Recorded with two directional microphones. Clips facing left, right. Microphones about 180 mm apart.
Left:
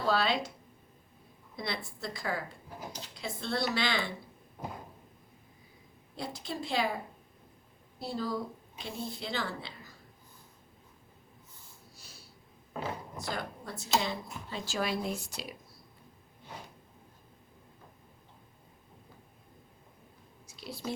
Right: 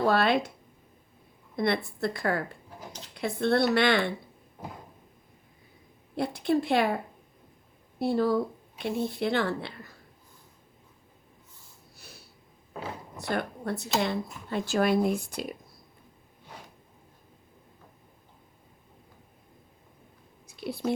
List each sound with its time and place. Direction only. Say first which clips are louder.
0.0 s speech: right 6 dB; 60° right (ahead or behind)
1.5 s speech: right 11 dB; 60° right (ahead or behind)
6.1 s speech: right 12 dB; 60° right (ahead or behind)
13.2 s speech: right 9 dB; 60° right (ahead or behind)
20.5 s a woman's voice: right 9 dB; 60° right (ahead or behind)